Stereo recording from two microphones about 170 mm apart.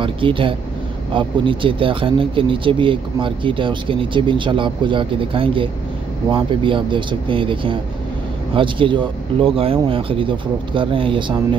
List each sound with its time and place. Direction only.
0.0 s speech: 30° right (ahead or behind)